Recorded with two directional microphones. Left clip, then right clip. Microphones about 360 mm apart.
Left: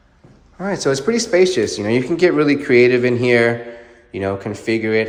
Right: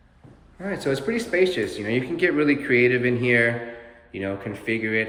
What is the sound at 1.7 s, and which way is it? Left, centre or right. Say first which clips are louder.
Speech: left 7 dB; centre.